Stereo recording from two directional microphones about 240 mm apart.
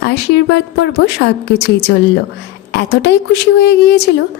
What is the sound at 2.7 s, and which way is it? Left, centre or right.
A woman's voice, left.